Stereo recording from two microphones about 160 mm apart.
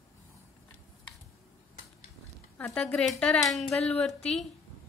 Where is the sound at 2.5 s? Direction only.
5° left (ahead or behind).